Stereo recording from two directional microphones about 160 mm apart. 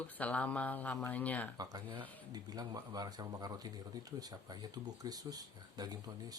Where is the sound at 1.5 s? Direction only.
25° right (ahead or behind).